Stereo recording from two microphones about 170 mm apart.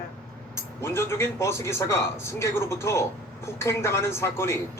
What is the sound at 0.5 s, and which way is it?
A man's voice, 15° left (ahead or behind).